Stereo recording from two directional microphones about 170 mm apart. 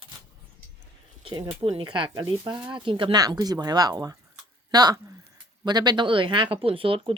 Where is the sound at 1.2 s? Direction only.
30° right (ahead or behind).